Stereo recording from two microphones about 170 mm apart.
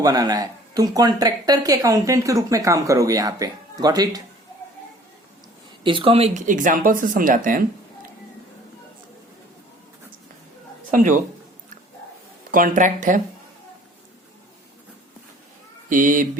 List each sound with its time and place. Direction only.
0.0 s speech: 20° right (ahead or behind)
5.8 s speech: 30° right (ahead or behind); by 7.6 s 55° right (ahead or behind)
10.9 s speech: 50° right (ahead or behind)
12.5 s speech: 55° right (ahead or behind)
15.9 s speech: 50° right (ahead or behind)